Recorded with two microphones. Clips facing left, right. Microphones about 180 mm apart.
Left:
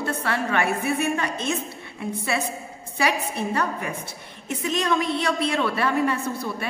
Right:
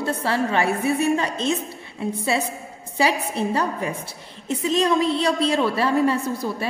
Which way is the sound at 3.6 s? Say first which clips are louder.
Right 2 dB; 30° right (ahead or behind).